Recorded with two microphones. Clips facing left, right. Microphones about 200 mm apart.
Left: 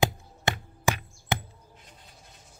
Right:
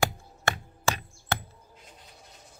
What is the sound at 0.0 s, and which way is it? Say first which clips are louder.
Music: left 2 dB; 20° left (ahead or behind).